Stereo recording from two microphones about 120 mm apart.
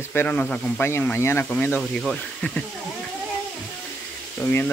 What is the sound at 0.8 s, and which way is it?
Speech, 20° left (ahead or behind).